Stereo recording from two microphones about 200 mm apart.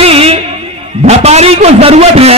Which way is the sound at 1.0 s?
30° right (ahead or behind).